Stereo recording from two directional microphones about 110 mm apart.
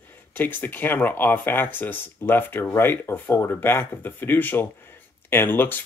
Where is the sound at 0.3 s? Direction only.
20° left (ahead or behind).